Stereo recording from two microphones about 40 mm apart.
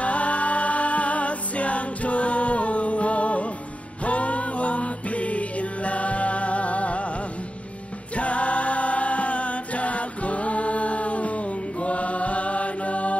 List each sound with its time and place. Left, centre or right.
0.0 s music: left
8.2 s music: left